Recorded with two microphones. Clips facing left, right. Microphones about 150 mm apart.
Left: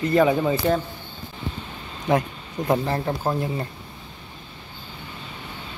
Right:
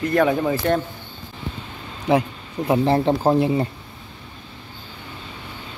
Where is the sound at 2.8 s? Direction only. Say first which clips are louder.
Right 7 dB; 20° right (ahead or behind).